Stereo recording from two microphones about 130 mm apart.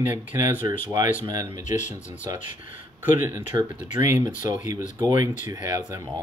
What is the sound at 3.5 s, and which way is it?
Speech, 25° right (ahead or behind).